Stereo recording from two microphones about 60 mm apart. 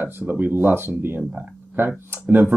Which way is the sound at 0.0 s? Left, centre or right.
Right.